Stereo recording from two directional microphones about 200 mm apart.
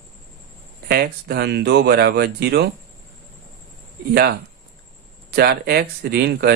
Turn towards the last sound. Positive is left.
turn(degrees=-55)  # may be behind; listen again after turning